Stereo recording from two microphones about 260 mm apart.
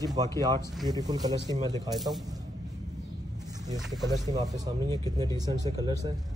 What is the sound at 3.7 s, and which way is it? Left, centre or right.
Speech, centre.